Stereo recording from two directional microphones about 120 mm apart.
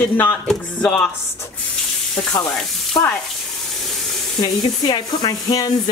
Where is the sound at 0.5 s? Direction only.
10° left (ahead or behind).